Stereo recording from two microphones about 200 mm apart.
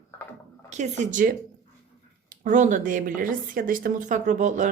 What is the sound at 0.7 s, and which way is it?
Speech, 35° right (ahead or behind).